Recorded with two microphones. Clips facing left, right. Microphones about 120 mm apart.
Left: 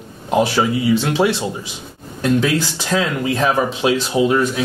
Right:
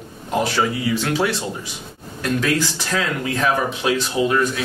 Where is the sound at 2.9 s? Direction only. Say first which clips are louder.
Left 5 dB; 20° left (ahead or behind).